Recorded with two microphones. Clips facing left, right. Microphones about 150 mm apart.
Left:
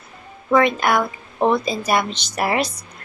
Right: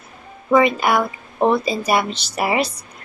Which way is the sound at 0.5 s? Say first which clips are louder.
Right 1 dB; 5° right (ahead or behind).